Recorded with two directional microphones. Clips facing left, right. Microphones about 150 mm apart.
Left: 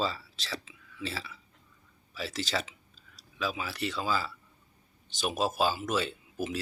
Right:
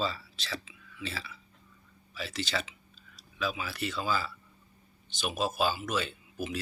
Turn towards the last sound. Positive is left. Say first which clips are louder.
# left 2 dB
turn(degrees=35)  # may be behind; listen again after turning